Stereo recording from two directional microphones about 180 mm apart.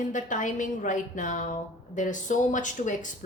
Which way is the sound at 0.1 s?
45° left (ahead or behind).